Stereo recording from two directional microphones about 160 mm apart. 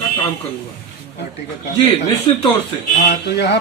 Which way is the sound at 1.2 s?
90° left.